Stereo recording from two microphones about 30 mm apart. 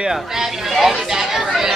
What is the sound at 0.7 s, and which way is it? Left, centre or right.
Speech, centre.